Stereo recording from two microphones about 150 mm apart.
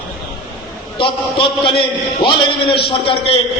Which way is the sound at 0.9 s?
35° left (ahead or behind).